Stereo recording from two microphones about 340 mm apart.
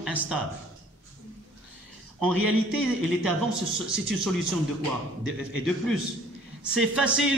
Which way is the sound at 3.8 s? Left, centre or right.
Right.